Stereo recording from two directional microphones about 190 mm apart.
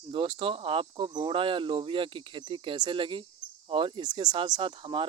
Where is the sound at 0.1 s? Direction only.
25° right (ahead or behind).